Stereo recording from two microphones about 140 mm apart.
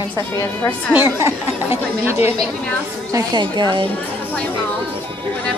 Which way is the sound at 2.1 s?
20° right (ahead or behind).